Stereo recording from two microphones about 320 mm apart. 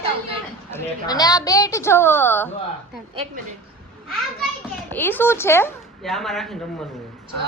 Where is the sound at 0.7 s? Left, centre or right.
Centre.